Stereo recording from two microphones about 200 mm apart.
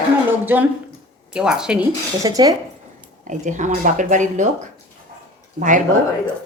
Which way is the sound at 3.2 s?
40° right (ahead or behind).